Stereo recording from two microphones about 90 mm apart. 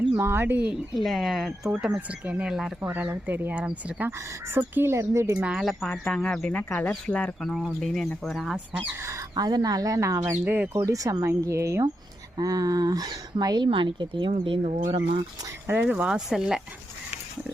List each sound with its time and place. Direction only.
0.2 s speech: 25° right (ahead or behind)
0.9 s speech: centre (ahead or behind)
2.8 s speech: 20° right (ahead or behind)
4.5 s speech: 25° right (ahead or behind)
5.4 s speech: 10° right (ahead or behind)
5.9 s speech: 10° left (ahead or behind)
7.5 s speech: 5° left (ahead or behind)
9.3 s speech: 50° right (ahead or behind)
10.4 s speech: 25° right (ahead or behind)
10.8 s speech: 40° right (ahead or behind); by 15.2 s 70° right (ahead or behind)
15.6 s speech: 20° right (ahead or behind)